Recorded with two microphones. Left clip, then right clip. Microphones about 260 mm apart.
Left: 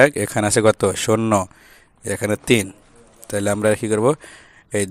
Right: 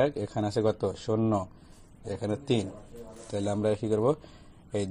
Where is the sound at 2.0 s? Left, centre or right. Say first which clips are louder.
Left 12 dB; left.